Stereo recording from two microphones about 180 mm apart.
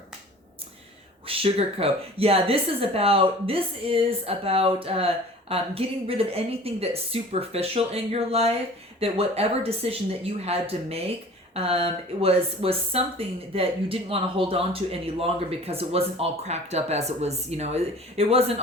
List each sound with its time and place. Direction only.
1.3 s a woman's voice: 30° right (ahead or behind)